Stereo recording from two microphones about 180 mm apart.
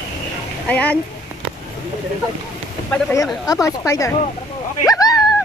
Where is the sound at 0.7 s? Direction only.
5° left (ahead or behind).